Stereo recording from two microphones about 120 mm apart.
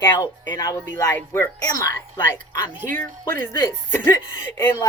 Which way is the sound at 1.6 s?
35° left (ahead or behind).